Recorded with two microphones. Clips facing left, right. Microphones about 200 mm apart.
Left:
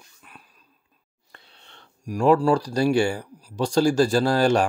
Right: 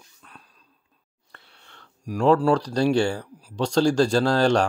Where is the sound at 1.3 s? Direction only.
20° left (ahead or behind).